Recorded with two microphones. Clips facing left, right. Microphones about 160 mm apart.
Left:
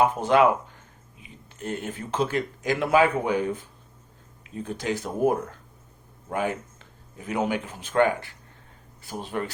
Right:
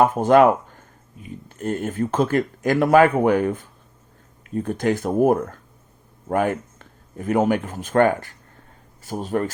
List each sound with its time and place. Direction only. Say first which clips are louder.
0.0 s speech: right 5 dB; 45° right (ahead or behind)